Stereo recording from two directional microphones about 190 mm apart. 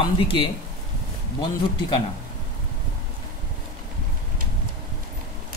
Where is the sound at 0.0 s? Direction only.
25° left (ahead or behind).